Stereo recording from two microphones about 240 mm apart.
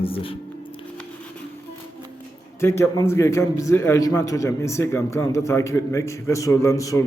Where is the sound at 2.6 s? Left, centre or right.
Centre.